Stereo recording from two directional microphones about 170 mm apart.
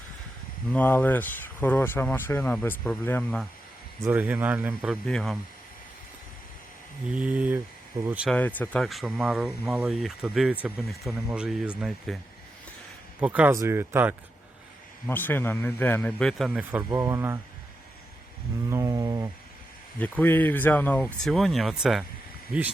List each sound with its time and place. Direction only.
0.7 s speech: 10° left (ahead or behind)
4.0 s speech: 10° right (ahead or behind)
7.1 s speech: 10° right (ahead or behind)
8.3 s speech: 10° left (ahead or behind); by 14.2 s 10° right (ahead or behind)
15.0 s speech: 10° left (ahead or behind); by 16.8 s 5° right (ahead or behind)
16.9 s speech: 20° right (ahead or behind)
18.7 s a sound: 20° right (ahead or behind)
20.0 s speech: 10° left (ahead or behind)